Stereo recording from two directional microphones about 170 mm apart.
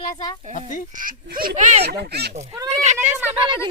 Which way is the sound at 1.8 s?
75° right (ahead or behind).